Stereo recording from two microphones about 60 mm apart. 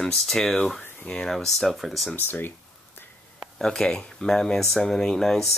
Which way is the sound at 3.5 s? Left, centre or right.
Centre.